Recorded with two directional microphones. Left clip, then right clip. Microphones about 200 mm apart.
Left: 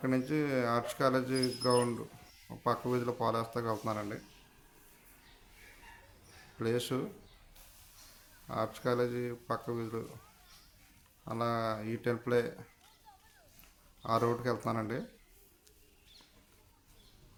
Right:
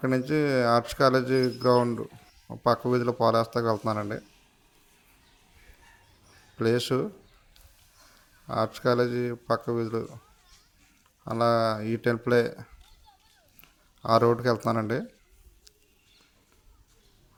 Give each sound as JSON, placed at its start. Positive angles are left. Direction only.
{"t": 0.0, "sound": "speech", "side_deg": -35}
{"t": 6.6, "sound": "speech", "side_deg": -35}
{"t": 8.4, "sound": "speech", "side_deg": -35}
{"t": 11.3, "sound": "speech", "side_deg": -35}
{"t": 14.0, "sound": "speech", "side_deg": -35}